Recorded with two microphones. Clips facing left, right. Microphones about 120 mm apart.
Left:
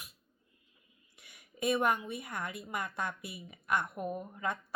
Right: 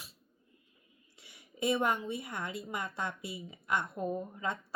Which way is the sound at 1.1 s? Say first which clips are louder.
Right 2 dB; 25° right (ahead or behind).